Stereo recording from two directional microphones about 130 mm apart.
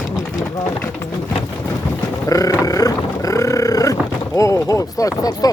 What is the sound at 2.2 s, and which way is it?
Grunt, 25° left (ahead or behind).